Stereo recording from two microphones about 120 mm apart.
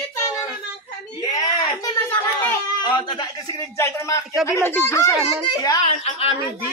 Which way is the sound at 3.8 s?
25° left (ahead or behind).